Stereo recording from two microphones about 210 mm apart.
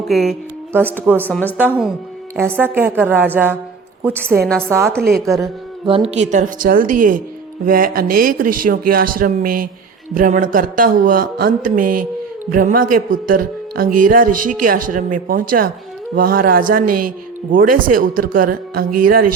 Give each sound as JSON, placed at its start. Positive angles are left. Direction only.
{"t": 0.1, "sound": "a woman's voice", "side_deg": 0}
{"t": 1.3, "sound": "a woman's voice", "side_deg": 10}
{"t": 1.5, "sound": "a woman's voice", "side_deg": -5}
{"t": 4.4, "sound": "a woman's voice", "side_deg": 5}
{"t": 4.7, "sound": "a woman's voice", "side_deg": -10}
{"t": 6.1, "sound": "a man's voice", "side_deg": -35}